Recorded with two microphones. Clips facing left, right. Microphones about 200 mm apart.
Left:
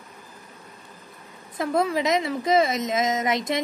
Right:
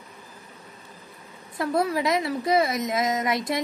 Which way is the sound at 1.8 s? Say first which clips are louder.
Left 1 dB; 20° left (ahead or behind).